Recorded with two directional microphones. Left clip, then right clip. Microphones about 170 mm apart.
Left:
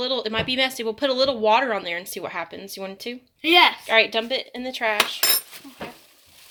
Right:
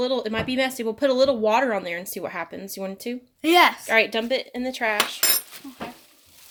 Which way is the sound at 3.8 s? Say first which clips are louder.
Left 1 dB; 25° right (ahead or behind).